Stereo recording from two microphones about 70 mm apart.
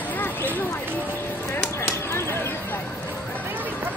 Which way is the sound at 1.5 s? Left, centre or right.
Left.